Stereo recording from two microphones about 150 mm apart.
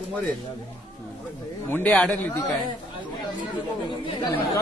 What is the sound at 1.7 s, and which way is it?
Speech, 10° left (ahead or behind).